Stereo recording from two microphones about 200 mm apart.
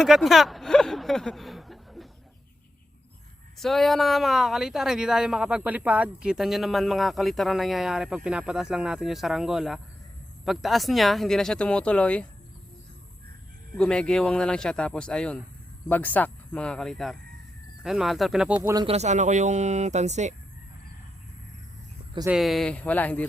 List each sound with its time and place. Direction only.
0.0 s speech: centre (ahead or behind)
3.6 s speech: centre (ahead or behind)
13.7 s speech: 5° left (ahead or behind)
18.9 s speech: 35° right (ahead or behind)
22.3 s speech: centre (ahead or behind)